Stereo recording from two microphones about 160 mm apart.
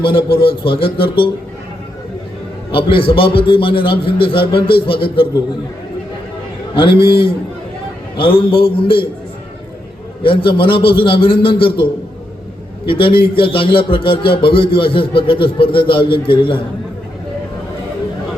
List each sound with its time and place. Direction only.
0.0 s a man's voice: 35° left (ahead or behind)
2.7 s a man's voice: 35° left (ahead or behind)
6.7 s a man's voice: 35° left (ahead or behind)
10.2 s a man's voice: 35° left (ahead or behind)